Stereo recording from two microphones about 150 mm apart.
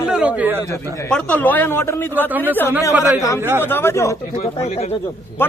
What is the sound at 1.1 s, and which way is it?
A man's voice, 10° left (ahead or behind).